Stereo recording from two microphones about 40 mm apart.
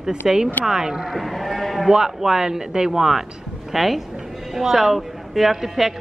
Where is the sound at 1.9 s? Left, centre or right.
Centre.